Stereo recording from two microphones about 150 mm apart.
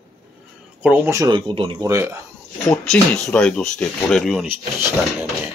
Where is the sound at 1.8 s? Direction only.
20° right (ahead or behind).